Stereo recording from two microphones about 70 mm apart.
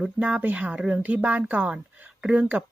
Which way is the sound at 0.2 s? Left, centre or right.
Right.